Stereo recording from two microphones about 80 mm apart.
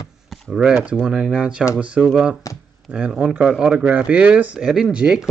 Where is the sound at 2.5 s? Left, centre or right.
Left.